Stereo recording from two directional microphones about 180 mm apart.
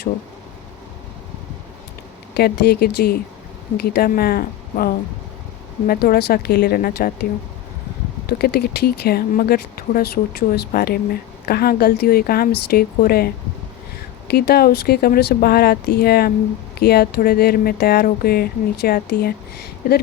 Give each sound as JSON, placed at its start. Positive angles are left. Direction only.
{"t": 2.3, "sound": "speech", "side_deg": 60}
{"t": 8.3, "sound": "speech", "side_deg": 60}